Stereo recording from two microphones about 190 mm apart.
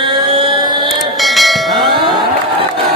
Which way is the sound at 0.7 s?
25° right (ahead or behind).